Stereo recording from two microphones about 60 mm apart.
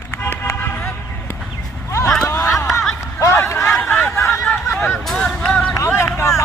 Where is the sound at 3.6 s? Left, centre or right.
Centre.